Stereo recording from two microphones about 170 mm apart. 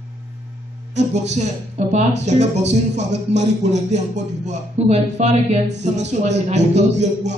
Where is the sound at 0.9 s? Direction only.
40° right (ahead or behind).